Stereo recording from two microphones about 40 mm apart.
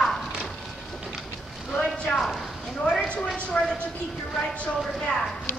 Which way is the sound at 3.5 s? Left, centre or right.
Left.